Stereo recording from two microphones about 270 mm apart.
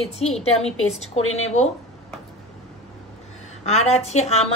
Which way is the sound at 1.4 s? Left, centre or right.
Left.